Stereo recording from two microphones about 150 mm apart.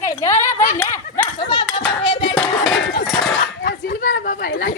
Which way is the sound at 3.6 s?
70° left (ahead or behind).